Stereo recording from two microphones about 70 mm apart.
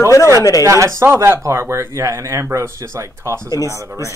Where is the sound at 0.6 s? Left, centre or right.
Right.